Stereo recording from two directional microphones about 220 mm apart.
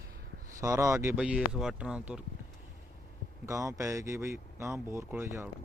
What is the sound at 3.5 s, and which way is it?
Speech, 15° right (ahead or behind).